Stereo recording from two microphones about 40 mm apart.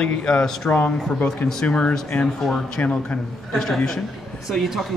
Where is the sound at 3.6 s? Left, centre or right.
Centre.